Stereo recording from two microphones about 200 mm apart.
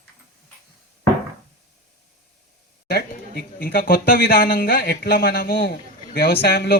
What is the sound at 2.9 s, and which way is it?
Speech, 50° left (ahead or behind).